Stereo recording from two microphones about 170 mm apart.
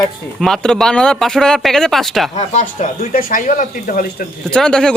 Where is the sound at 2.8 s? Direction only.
50° left (ahead or behind).